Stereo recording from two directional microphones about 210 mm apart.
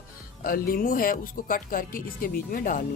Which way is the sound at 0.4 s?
40° left (ahead or behind).